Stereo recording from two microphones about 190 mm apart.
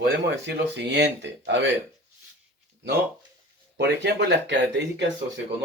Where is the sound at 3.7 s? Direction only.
65° right (ahead or behind).